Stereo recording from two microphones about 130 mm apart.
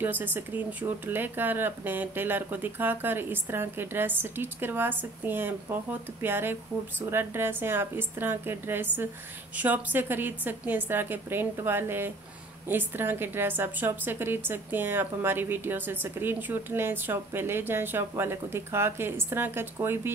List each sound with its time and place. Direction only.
0.0 s a woman's voice: 15° right (ahead or behind)